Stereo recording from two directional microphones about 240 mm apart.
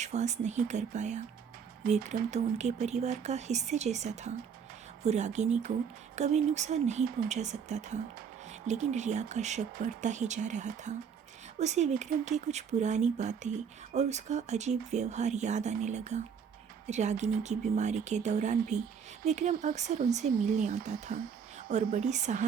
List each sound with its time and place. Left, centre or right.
0.0 s speech: right